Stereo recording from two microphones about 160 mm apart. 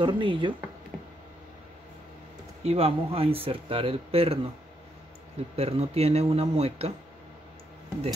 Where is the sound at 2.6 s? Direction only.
40° right (ahead or behind).